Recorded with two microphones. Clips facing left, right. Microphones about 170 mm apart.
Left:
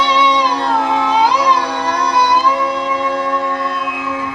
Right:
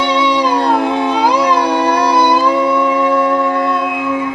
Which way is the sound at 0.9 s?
55° right (ahead or behind).